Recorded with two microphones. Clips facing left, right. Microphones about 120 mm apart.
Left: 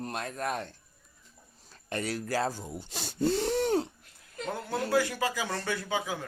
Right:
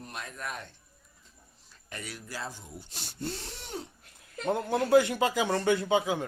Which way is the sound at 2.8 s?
90° left.